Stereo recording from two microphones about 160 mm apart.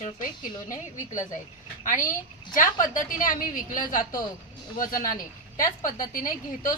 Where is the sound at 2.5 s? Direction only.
55° left (ahead or behind).